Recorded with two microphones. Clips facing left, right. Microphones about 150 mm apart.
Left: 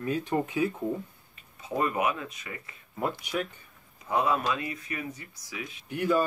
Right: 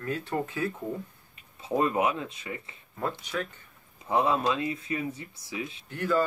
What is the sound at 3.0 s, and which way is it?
Speech, 15° left (ahead or behind).